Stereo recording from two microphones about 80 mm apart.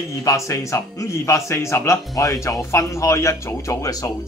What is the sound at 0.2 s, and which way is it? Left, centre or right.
Speech, left.